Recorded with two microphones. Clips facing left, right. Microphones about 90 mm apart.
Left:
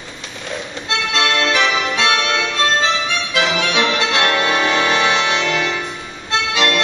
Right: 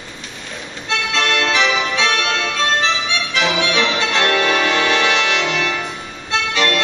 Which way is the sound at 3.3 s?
15° left (ahead or behind).